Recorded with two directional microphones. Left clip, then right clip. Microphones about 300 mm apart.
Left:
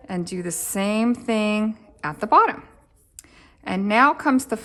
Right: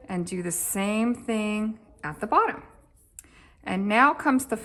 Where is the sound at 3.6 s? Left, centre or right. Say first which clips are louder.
Left 3 dB; centre.